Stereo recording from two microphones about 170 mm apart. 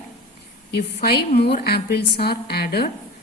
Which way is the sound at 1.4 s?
70° left (ahead or behind).